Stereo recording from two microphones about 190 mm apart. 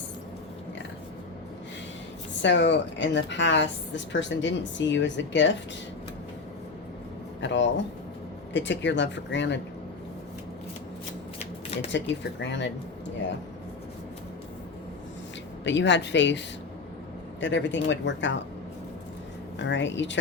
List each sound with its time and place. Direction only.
2.4 s a woman's voice: 70° left (ahead or behind)
7.4 s a woman's voice: 70° left (ahead or behind)
11.3 s shuffling cards: 35° left (ahead or behind)
11.9 s a woman's voice: 70° left (ahead or behind)
15.6 s a woman's voice: 70° left (ahead or behind)
17.4 s a woman's voice: 75° left (ahead or behind)
19.5 s a woman's voice: 70° left (ahead or behind)